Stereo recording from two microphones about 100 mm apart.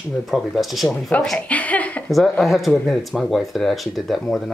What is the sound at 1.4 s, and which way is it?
Speech, 15° left (ahead or behind).